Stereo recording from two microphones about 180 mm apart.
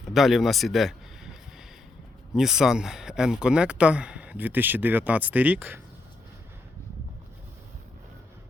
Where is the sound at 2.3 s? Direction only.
5° right (ahead or behind).